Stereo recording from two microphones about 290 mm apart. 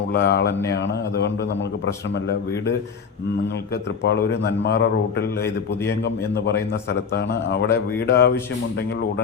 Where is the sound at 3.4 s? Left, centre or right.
Left.